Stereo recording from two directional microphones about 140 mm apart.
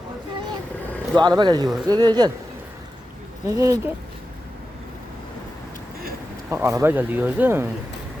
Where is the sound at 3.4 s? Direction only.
25° right (ahead or behind).